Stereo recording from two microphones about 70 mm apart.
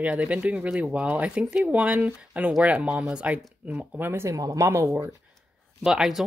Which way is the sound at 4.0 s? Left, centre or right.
Right.